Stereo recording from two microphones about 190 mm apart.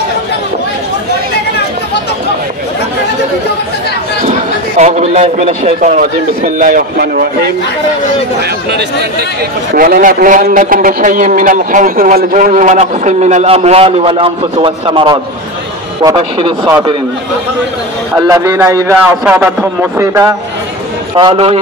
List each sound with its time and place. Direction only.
4.2 s a sound: 35° right (ahead or behind)
5.8 s a man's voice: 45° right (ahead or behind)
9.8 s a man's voice: 50° right (ahead or behind); by 16.5 s 30° right (ahead or behind)
18.3 s a man's voice: 15° right (ahead or behind)
21.2 s a man's voice: 30° right (ahead or behind)